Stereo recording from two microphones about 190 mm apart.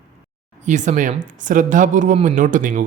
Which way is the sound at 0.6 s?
40° right (ahead or behind).